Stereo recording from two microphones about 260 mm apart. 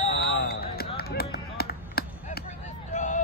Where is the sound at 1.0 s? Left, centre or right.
Left.